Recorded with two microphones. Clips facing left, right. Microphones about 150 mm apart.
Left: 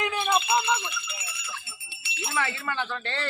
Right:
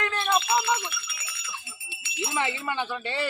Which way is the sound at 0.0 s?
15° left (ahead or behind).